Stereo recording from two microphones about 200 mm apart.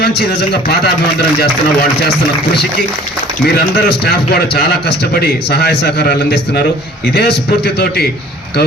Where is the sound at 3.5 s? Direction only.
55° left (ahead or behind).